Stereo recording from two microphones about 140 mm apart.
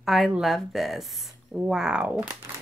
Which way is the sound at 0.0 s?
Centre (ahead or behind).